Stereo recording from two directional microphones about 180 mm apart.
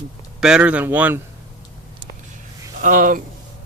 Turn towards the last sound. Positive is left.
turn(degrees=-45)  # may be behind; listen again after turning